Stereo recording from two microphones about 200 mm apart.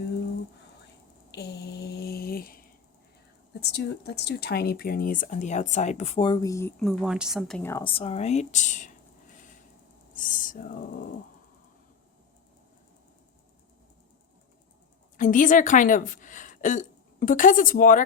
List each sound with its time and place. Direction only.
1.3 s mantra: 55° left (ahead or behind)
3.6 s speech: 55° left (ahead or behind); by 7.7 s 5° left (ahead or behind)
7.7 s speech: 20° left (ahead or behind); by 9.6 s 40° left (ahead or behind)
10.2 s owl: 40° left (ahead or behind)
15.2 s a woman's voice: 40° left (ahead or behind)